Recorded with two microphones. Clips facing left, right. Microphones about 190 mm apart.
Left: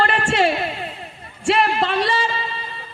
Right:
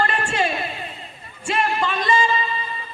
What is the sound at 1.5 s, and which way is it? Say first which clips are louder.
Music: left 4 dB; 70° left (ahead or behind).